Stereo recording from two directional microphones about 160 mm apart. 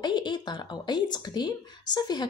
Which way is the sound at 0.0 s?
30° left (ahead or behind).